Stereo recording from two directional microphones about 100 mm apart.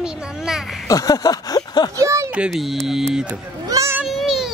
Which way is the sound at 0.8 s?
35° left (ahead or behind).